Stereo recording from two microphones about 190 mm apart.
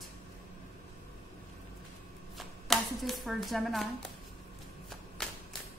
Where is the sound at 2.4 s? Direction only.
Centre (ahead or behind).